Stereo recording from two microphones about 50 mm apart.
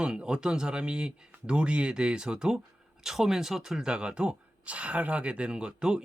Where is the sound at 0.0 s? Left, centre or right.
Centre.